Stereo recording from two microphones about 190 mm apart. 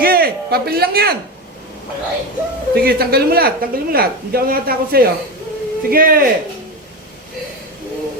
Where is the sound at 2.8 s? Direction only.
55° right (ahead or behind).